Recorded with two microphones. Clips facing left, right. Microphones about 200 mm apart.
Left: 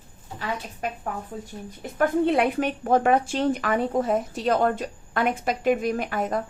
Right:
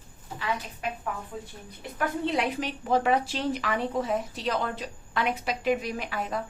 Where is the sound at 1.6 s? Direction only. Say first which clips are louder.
Left 8 dB; 25° left (ahead or behind).